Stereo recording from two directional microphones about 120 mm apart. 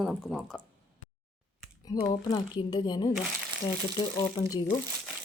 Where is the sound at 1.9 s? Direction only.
30° left (ahead or behind).